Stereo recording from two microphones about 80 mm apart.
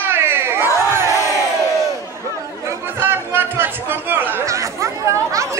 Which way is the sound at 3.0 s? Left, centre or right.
Right.